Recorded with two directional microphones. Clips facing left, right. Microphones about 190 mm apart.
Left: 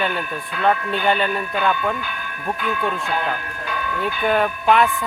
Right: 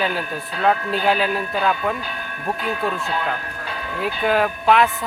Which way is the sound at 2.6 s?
30° right (ahead or behind).